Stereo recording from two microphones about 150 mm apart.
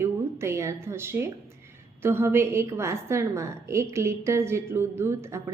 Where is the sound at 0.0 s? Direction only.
15° right (ahead or behind).